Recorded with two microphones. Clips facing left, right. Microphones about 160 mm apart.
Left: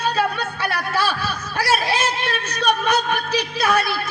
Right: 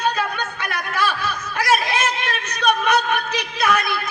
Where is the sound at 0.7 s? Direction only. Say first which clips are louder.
Even; 35° left (ahead or behind).